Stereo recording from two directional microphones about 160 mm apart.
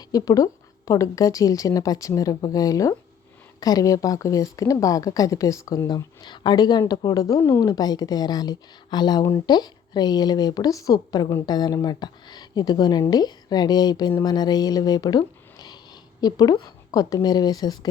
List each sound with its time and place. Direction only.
0.0 s a woman's voice: 20° left (ahead or behind)